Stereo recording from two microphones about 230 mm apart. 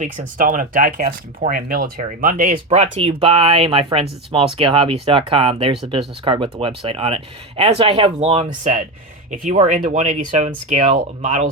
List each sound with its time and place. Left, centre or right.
0.0 s speech: right